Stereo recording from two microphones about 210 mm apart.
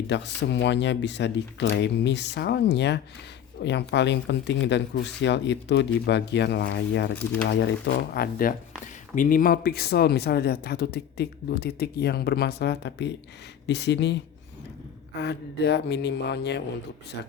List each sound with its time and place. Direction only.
0.1 s speech: 55° left (ahead or behind)
15.2 s speech: 55° left (ahead or behind)